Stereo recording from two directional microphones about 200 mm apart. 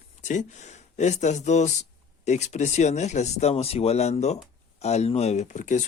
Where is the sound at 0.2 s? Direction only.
40° left (ahead or behind).